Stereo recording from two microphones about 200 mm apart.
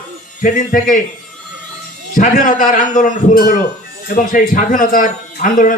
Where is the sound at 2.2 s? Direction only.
40° left (ahead or behind).